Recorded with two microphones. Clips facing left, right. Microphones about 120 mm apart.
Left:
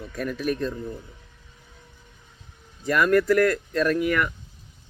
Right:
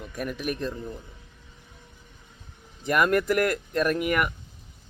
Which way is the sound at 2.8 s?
20° right (ahead or behind).